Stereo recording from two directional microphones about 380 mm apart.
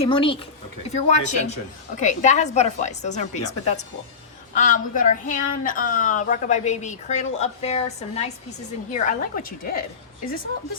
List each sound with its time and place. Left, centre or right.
0.0 s a woman's voice: centre
4.5 s a woman's voice: centre